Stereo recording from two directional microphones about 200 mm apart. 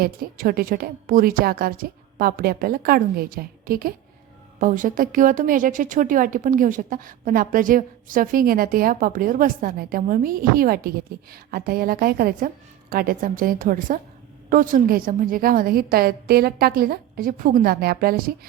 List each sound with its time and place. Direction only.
0.0 s a woman's voice: 45° right (ahead or behind)